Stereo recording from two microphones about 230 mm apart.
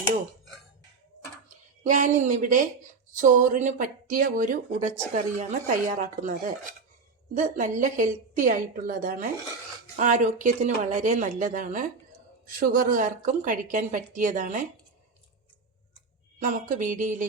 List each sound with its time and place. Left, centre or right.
1.5 s speech: right
16.6 s speech: right